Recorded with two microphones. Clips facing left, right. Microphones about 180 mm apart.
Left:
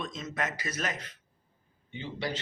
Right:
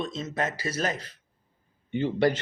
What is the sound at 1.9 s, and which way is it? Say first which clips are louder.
Speech: right 12 dB; 55° right (ahead or behind).